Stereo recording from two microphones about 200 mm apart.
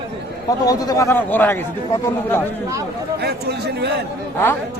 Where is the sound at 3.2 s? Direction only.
55° right (ahead or behind).